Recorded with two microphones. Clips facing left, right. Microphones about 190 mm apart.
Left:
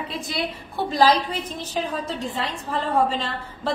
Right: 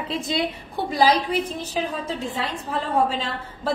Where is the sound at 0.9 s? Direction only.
10° right (ahead or behind).